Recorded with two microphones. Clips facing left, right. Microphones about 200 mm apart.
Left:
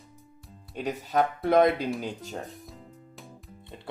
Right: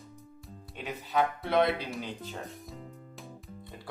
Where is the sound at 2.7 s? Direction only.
Centre (ahead or behind).